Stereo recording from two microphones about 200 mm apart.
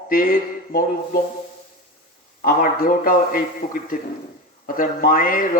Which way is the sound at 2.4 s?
45° left (ahead or behind).